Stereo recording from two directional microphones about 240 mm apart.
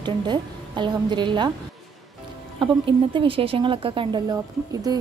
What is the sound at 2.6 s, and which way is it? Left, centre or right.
A woman's voice, right.